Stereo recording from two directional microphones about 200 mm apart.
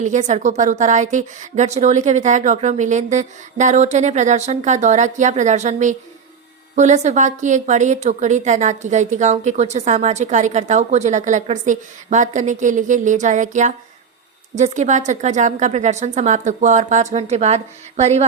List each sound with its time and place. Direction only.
0.0 s a woman's voice: 35° right (ahead or behind)